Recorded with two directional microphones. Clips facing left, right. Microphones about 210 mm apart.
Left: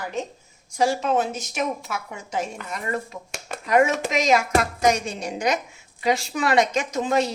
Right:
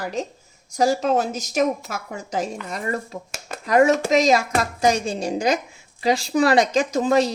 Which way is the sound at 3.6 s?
35° right (ahead or behind).